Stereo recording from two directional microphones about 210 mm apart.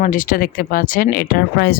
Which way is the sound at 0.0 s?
40° left (ahead or behind).